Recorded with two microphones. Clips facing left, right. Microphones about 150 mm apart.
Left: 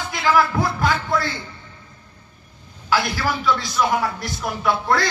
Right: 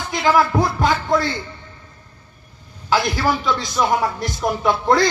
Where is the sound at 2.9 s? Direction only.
20° right (ahead or behind).